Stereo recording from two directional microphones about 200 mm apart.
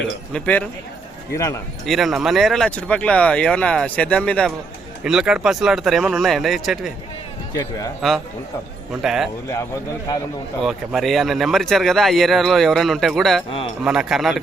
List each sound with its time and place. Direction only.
0.3 s a man's voice: 5° left (ahead or behind)
1.9 s speech: centre (ahead or behind)
7.5 s a man's voice: 15° left (ahead or behind)
8.9 s speech: 5° right (ahead or behind)
10.6 s speech: centre (ahead or behind)